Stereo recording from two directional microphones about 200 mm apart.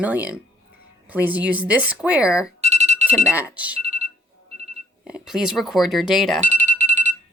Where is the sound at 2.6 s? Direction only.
35° right (ahead or behind).